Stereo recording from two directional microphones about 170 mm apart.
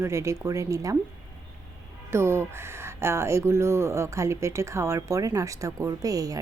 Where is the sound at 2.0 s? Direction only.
15° right (ahead or behind).